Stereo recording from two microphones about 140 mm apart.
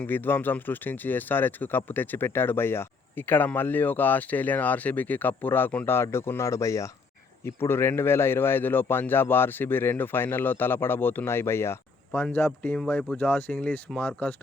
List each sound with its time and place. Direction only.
0.0 s speech: 15° left (ahead or behind)
12.5 s speech: 5° left (ahead or behind)